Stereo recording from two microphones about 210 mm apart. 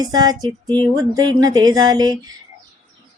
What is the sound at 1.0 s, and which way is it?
Speech, 20° right (ahead or behind).